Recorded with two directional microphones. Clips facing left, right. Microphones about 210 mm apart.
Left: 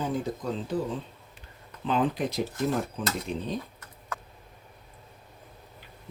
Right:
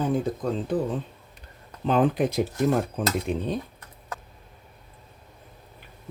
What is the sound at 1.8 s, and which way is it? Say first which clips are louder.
Speech: right 5 dB; 50° right (ahead or behind).